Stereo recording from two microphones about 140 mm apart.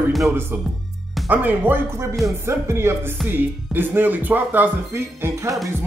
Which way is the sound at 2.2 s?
20° right (ahead or behind).